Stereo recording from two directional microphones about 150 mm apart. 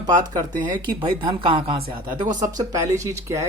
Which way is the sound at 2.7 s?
20° right (ahead or behind).